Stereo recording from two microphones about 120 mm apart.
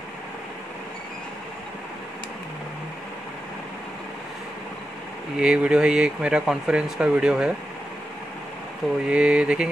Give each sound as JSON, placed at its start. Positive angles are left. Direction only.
{"t": 5.4, "sound": "speech", "side_deg": -10}
{"t": 9.0, "sound": "speech", "side_deg": -10}